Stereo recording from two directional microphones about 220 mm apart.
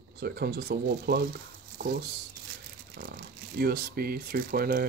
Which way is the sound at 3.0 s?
45° right (ahead or behind).